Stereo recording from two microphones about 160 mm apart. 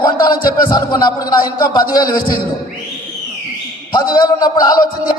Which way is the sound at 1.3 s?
25° left (ahead or behind).